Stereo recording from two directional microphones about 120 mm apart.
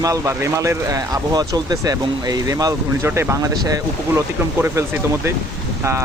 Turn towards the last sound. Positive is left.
turn(degrees=-25)  # may be behind; listen again after turning